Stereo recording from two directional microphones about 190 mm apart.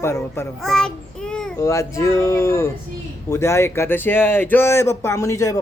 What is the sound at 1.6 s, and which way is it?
Speech, 15° left (ahead or behind).